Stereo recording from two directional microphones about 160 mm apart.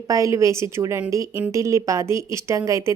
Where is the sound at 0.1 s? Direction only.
20° right (ahead or behind).